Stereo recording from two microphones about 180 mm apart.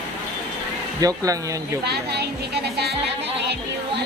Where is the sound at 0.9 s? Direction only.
20° right (ahead or behind).